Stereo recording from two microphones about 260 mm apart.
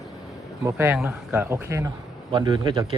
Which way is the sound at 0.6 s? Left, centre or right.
Centre.